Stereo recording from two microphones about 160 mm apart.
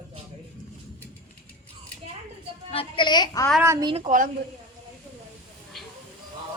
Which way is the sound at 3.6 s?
20° right (ahead or behind).